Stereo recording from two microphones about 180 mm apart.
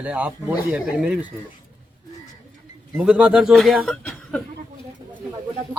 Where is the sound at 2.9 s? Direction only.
5° right (ahead or behind).